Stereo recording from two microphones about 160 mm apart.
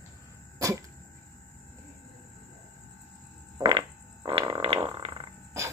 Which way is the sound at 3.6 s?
35° right (ahead or behind).